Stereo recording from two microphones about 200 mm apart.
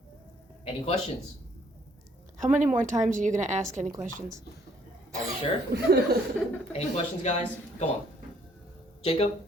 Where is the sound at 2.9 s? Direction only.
40° right (ahead or behind).